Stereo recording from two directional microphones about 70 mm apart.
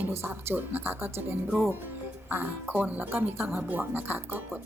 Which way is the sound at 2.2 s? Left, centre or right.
Right.